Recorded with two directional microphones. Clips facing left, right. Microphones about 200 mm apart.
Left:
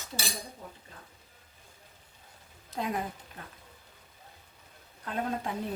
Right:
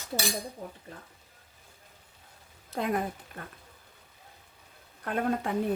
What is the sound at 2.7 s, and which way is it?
Speech, 55° right (ahead or behind).